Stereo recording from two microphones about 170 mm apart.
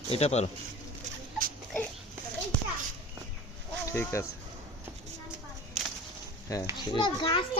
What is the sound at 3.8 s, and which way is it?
Speech, 15° left (ahead or behind).